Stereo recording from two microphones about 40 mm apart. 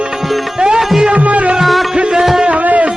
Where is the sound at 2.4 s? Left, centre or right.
Right.